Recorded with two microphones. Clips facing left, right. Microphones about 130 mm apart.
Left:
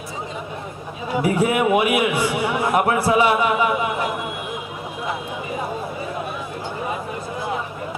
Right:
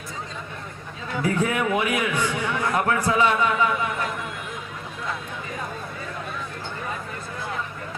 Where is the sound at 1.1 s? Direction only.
15° left (ahead or behind).